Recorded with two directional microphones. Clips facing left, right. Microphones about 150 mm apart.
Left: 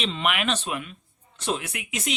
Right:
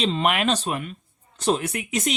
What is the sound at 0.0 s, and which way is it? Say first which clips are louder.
Speech: right 5 dB; 40° right (ahead or behind).